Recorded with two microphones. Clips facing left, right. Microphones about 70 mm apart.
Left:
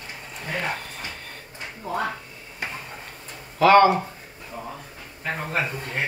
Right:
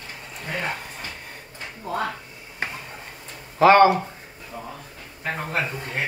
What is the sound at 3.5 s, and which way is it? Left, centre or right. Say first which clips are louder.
Speech: right 1 dB; right.